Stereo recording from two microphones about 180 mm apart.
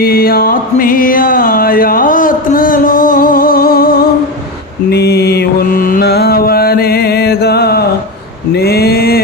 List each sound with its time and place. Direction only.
0.0 s music: 55° left (ahead or behind)
4.9 s mantra: 65° left (ahead or behind)